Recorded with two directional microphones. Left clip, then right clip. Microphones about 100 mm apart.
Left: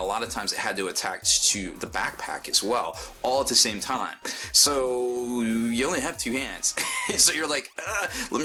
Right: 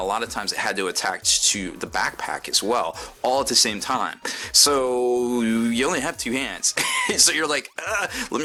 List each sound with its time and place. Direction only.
0.1 s speech: 25° right (ahead or behind)